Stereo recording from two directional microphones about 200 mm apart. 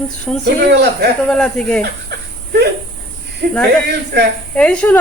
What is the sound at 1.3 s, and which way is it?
Speech, 5° left (ahead or behind).